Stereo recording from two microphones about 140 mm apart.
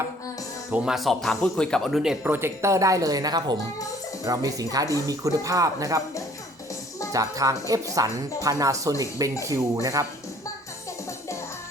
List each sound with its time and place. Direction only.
0.7 s speech: 5° right (ahead or behind); by 6.0 s 25° right (ahead or behind)
7.1 s speech: 25° right (ahead or behind)